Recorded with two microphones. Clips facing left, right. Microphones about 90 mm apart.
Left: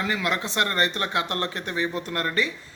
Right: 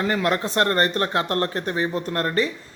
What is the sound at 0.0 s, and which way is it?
Speech, 40° right (ahead or behind).